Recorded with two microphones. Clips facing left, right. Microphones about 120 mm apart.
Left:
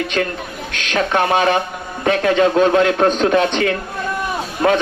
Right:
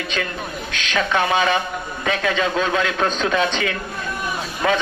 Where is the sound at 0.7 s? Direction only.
55° left (ahead or behind).